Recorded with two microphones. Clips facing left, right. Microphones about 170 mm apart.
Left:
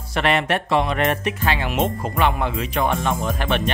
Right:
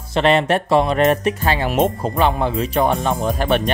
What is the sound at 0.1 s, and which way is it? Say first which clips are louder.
Speech: right 5 dB; 30° right (ahead or behind).